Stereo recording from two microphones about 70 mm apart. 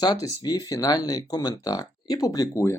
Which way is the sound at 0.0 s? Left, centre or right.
Left.